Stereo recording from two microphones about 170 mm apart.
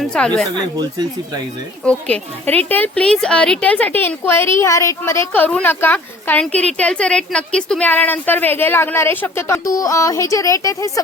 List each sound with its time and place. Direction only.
0.0 s speech: 5° left (ahead or behind)
0.5 s speech: 25° right (ahead or behind)
1.8 s a woman's voice: 5° left (ahead or behind)